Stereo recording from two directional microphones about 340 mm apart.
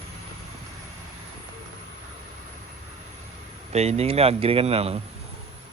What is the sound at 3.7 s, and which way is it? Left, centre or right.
Speech, centre.